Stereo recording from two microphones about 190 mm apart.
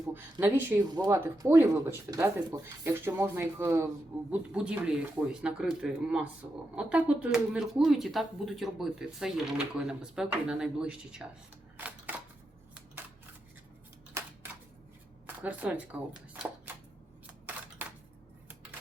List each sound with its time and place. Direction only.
0.1 s speech: 10° right (ahead or behind)
6.4 s speech: 15° right (ahead or behind)
6.7 s speech: 5° right (ahead or behind)
11.8 s a sound: 10° right (ahead or behind)
14.2 s a sound: 15° right (ahead or behind)
15.4 s speech: 5° right (ahead or behind)
17.2 s camera: 10° right (ahead or behind)